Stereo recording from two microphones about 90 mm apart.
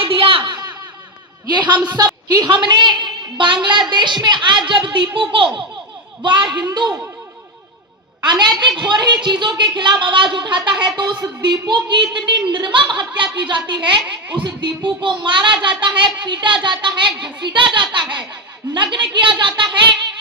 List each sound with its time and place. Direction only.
0.0 s a sound: 80° right
1.5 s a woman's voice: 55° right (ahead or behind)
8.2 s a woman's voice: 55° right (ahead or behind)